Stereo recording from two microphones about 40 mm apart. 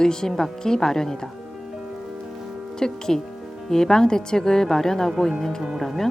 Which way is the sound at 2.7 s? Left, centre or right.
Centre.